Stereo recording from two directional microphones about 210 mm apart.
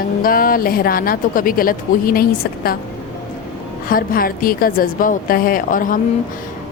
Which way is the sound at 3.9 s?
45° left (ahead or behind).